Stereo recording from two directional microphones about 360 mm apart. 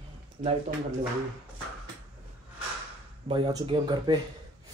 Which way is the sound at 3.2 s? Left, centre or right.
Centre.